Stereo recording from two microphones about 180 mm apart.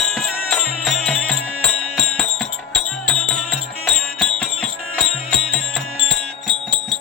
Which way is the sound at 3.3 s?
5° left (ahead or behind).